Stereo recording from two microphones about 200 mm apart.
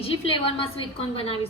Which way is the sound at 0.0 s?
30° left (ahead or behind).